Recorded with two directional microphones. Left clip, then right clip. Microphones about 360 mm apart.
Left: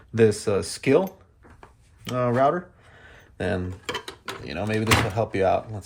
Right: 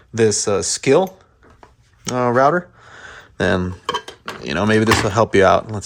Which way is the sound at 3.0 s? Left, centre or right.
Centre.